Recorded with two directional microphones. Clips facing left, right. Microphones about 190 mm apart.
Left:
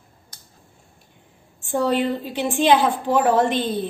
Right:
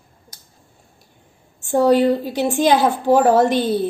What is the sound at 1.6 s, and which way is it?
A woman's voice, 40° right (ahead or behind).